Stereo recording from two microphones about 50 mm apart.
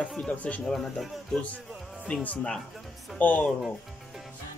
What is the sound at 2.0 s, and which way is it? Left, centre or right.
Speech, left.